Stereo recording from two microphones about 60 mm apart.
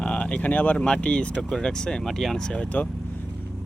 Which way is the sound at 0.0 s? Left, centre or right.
Left.